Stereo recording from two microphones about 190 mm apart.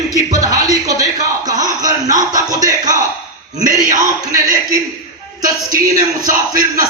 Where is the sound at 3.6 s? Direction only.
45° right (ahead or behind).